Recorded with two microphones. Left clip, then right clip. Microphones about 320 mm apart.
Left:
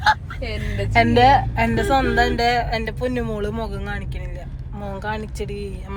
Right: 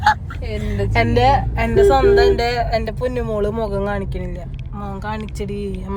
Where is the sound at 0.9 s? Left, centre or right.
Centre.